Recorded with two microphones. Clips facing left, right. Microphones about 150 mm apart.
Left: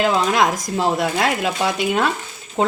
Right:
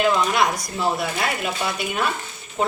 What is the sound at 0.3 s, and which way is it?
A woman's voice, 90° left.